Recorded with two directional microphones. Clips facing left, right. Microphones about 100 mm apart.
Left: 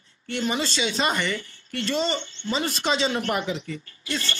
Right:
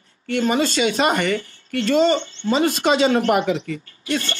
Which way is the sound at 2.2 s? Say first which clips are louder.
Right 6 dB; 25° right (ahead or behind).